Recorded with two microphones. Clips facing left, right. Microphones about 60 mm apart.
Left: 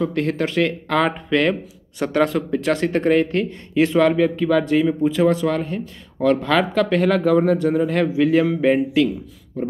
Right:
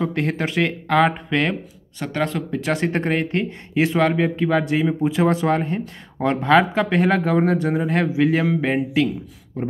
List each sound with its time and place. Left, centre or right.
0.0 s speech: centre
4.2 s speech: centre